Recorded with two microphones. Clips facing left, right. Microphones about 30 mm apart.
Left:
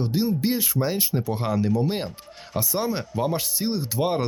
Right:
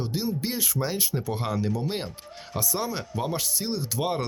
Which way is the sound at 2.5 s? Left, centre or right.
Centre.